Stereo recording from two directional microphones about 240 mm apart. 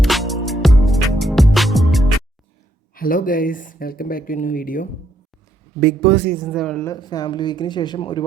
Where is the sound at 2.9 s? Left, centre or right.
Left.